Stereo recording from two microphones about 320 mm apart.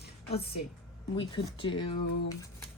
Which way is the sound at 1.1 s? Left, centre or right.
Centre.